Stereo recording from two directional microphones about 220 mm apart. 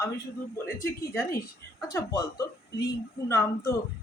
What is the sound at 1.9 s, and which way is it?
Speech, 15° left (ahead or behind).